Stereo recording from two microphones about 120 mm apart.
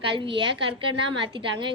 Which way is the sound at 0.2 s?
45° right (ahead or behind).